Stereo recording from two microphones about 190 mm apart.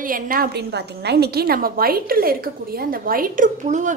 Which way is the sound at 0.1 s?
50° right (ahead or behind).